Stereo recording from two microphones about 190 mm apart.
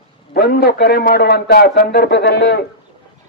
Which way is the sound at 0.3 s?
55° left (ahead or behind).